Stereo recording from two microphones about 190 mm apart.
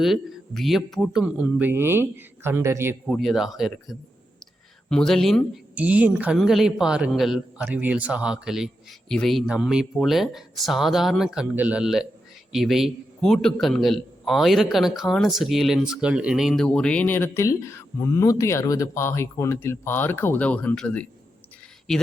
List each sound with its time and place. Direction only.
0.0 s speech: centre (ahead or behind)
3.1 s a man's voice: centre (ahead or behind)